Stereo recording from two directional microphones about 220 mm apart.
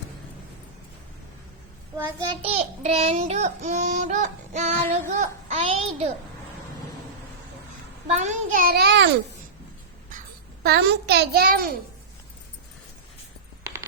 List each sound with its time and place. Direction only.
2.0 s a child's voice: 20° right (ahead or behind)
2.8 s child singing: 25° right (ahead or behind)
8.0 s a child's voice: 35° right (ahead or behind)
10.6 s a child's voice: 45° right (ahead or behind)